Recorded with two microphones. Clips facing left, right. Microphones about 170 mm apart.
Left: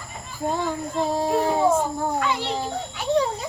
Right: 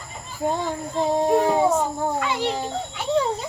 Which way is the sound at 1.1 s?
20° right (ahead or behind).